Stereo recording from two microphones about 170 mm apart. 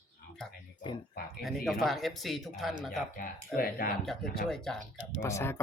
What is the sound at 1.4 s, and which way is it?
Speech, centre (ahead or behind).